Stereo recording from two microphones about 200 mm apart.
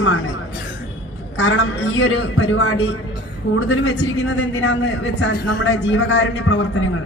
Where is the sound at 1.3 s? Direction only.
70° left (ahead or behind).